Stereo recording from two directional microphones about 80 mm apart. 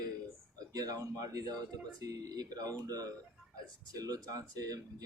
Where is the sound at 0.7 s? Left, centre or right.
Right.